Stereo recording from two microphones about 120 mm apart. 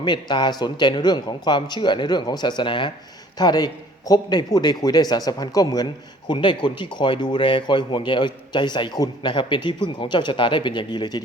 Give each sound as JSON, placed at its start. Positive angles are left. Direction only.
{"t": 0.0, "sound": "a man's voice", "side_deg": 40}